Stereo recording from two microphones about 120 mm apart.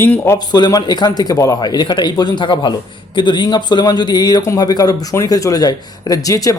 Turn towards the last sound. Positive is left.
turn(degrees=30)  # may be behind; listen again after turning